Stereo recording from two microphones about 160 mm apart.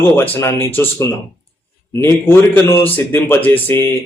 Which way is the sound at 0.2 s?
15° left (ahead or behind).